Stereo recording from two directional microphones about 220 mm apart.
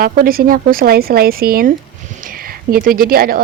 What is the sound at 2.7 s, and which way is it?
Speech, 40° right (ahead or behind).